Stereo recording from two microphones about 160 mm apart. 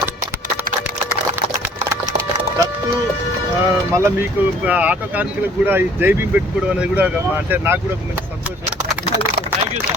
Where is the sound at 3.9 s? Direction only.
15° right (ahead or behind).